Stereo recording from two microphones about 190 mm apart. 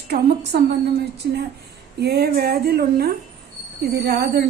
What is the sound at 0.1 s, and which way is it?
A woman's voice, 60° right (ahead or behind).